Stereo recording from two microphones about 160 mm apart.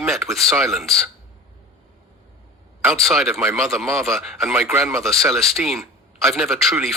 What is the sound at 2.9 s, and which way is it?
Speech, centre (ahead or behind).